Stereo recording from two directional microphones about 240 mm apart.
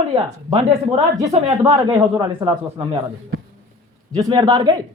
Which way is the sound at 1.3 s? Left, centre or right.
Right.